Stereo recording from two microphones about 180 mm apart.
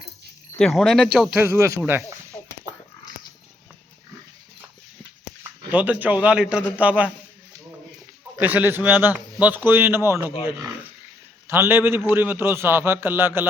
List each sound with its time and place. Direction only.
0.6 s speech: centre (ahead or behind)
2.3 s a sound: 20° left (ahead or behind)
5.4 s a man's voice: 10° right (ahead or behind)
8.4 s a man's voice: 10° right (ahead or behind)
11.4 s a man's voice: 15° right (ahead or behind)